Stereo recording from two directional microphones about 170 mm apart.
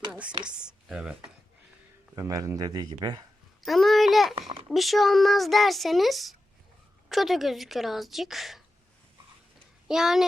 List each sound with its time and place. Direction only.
0.4 s speech: 5° right (ahead or behind)
2.1 s a man's voice: 20° right (ahead or behind)
3.7 s a sound: centre (ahead or behind)
4.4 s a sound: 30° right (ahead or behind)
4.7 s speech: centre (ahead or behind)
9.9 s speech: 5° right (ahead or behind)